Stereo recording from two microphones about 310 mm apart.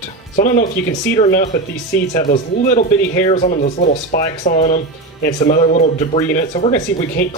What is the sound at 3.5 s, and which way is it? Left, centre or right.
Speech, left.